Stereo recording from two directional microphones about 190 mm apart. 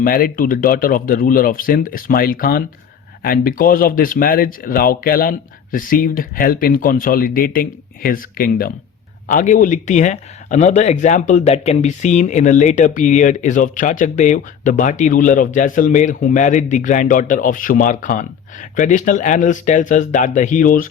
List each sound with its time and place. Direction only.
0.0 s speech: 50° left (ahead or behind)